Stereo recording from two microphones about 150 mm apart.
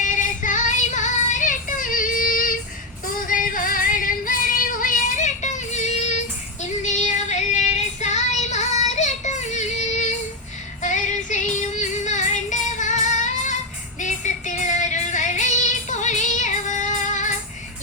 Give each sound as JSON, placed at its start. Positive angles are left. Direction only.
{"t": 0.0, "sound": "child singing", "side_deg": 55}
{"t": 3.2, "sound": "female singing", "side_deg": 65}
{"t": 10.8, "sound": "music", "side_deg": 55}